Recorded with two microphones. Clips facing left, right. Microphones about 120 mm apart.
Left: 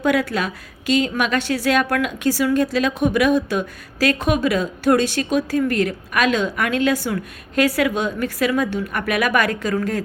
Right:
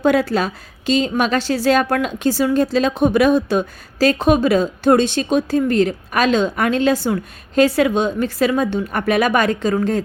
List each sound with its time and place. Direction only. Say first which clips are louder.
0.0 s a woman's voice: right 4 dB; 30° right (ahead or behind)